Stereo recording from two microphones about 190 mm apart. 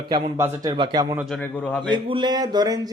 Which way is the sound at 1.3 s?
10° left (ahead or behind).